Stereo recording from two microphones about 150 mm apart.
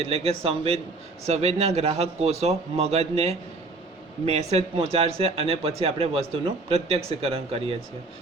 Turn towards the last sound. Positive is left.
turn(degrees=-40)  # may be behind; listen again after turning